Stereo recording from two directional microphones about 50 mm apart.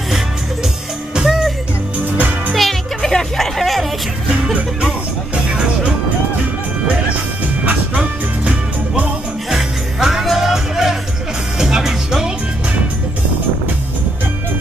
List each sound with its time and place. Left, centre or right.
1.2 s music: centre
2.1 s music: right
2.5 s music: centre
8.0 s music: right
9.5 s music: centre